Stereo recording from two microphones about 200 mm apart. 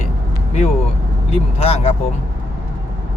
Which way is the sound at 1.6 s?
30° left (ahead or behind).